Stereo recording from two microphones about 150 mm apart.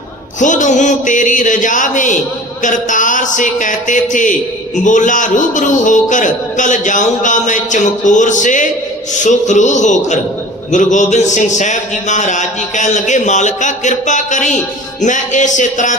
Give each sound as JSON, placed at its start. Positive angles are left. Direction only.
{"t": 0.3, "sound": "a man's voice", "side_deg": 55}